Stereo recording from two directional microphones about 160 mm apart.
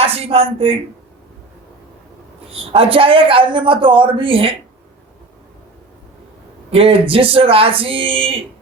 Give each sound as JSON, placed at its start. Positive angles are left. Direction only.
{"t": 0.0, "sound": "speech", "side_deg": -35}
{"t": 2.7, "sound": "a woman's voice", "side_deg": -35}
{"t": 6.7, "sound": "a woman's voice", "side_deg": -40}